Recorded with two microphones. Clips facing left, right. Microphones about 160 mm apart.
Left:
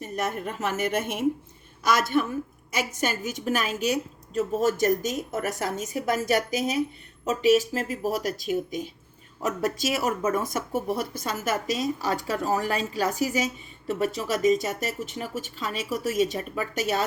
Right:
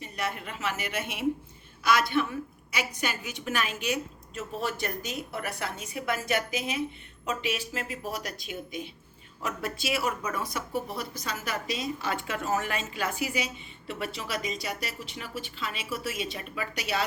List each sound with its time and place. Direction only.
0.0 s speech: 45° left (ahead or behind)